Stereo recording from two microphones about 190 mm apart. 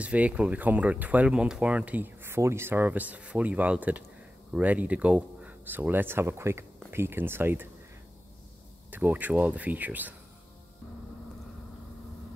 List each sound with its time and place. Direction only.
0.0 s speech: 5° right (ahead or behind)
8.9 s speech: 10° right (ahead or behind)